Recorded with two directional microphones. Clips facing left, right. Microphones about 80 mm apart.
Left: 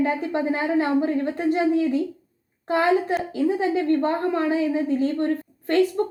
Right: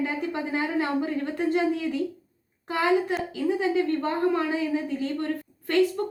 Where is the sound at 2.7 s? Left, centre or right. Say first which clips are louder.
Left 3 dB; left.